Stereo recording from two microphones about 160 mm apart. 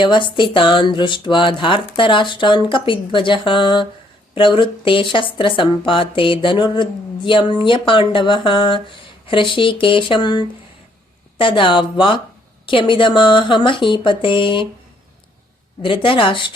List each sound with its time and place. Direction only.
0.0 s speech: 30° left (ahead or behind)
15.8 s speech: 30° left (ahead or behind)